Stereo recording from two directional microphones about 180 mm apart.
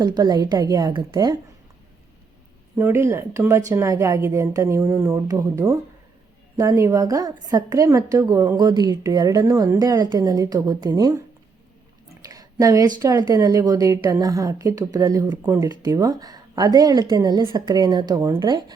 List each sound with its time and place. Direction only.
0.0 s a woman's voice: 20° right (ahead or behind)
2.7 s a woman's voice: 15° right (ahead or behind)
12.2 s a sound: 20° right (ahead or behind)
13.0 s a woman's voice: 20° right (ahead or behind)